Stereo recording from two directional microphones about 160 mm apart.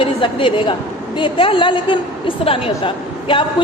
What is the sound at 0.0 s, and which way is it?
A woman's voice, 35° left (ahead or behind).